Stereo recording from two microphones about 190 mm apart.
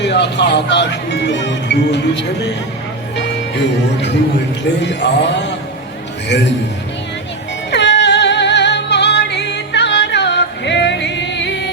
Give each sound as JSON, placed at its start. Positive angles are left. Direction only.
{"t": 0.0, "sound": "speech", "side_deg": 65}
{"t": 4.8, "sound": "a man's voice", "side_deg": 65}
{"t": 7.7, "sound": "music", "side_deg": 65}